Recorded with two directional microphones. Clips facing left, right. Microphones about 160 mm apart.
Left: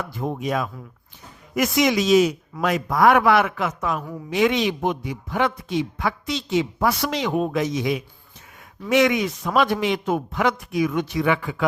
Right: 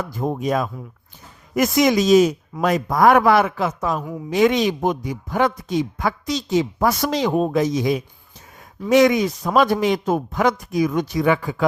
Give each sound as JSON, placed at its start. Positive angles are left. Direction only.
{"t": 0.0, "sound": "a man's voice", "side_deg": -40}